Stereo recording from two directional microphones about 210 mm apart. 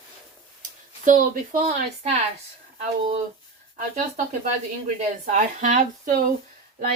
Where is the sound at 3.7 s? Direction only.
35° right (ahead or behind).